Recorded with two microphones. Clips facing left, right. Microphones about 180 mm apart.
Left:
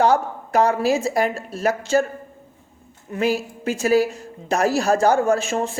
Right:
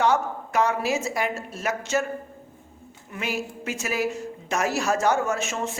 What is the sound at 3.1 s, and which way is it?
A woman's voice, 35° left (ahead or behind).